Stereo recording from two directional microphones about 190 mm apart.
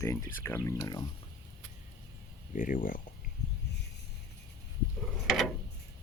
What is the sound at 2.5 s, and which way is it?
Speech, 45° left (ahead or behind).